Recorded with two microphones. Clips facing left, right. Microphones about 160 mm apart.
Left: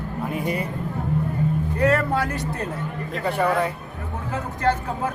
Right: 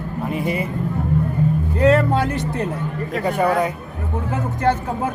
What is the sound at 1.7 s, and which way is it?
Speech, 25° right (ahead or behind).